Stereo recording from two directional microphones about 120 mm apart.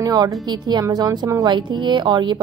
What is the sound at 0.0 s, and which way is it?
A woman's voice, 35° right (ahead or behind).